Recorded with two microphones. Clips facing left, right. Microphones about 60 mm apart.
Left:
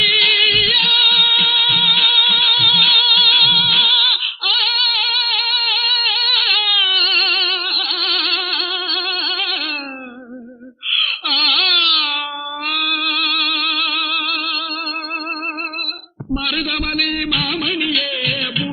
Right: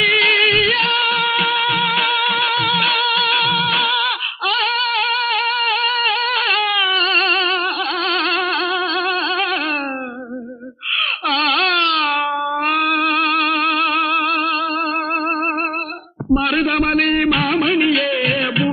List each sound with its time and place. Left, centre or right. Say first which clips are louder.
0.0 s music: right 2 dB; right
8.0 s a sound: right 3 dB; right
11.3 s carnatic music: right 4 dB; right
12.7 s music: right 3 dB; right
16.3 s music: right 6 dB; right